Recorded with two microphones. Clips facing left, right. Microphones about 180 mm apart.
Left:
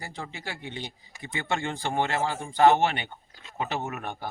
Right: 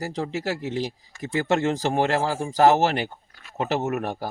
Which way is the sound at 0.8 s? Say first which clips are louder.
Right 10 dB; 90° right.